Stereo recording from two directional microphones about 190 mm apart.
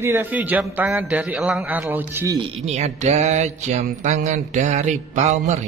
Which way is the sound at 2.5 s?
35° right (ahead or behind).